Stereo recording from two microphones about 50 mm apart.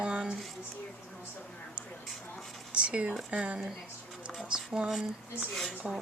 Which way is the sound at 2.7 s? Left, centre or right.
Right.